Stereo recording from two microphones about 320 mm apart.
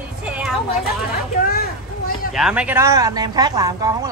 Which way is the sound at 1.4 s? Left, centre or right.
Left.